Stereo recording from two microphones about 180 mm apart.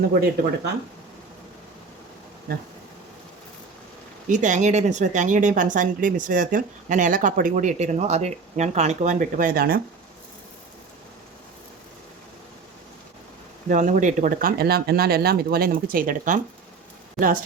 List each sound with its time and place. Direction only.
0.1 s speech: 60° right (ahead or behind)
4.3 s speech: 45° right (ahead or behind)
13.7 s speech: 45° right (ahead or behind)